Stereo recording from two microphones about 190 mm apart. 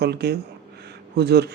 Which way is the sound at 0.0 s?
60° right (ahead or behind).